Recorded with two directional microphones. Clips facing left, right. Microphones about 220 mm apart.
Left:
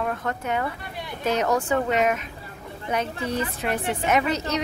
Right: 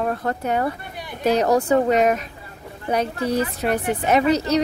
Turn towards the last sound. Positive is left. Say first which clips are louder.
# right 6 dB
turn(degrees=-35)  # may be behind; listen again after turning